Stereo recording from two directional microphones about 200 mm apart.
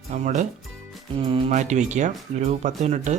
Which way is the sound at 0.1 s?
35° right (ahead or behind).